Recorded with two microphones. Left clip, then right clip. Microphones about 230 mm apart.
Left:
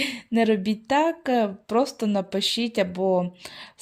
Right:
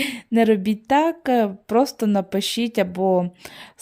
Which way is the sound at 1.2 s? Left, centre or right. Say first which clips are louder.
Right 3 dB; right.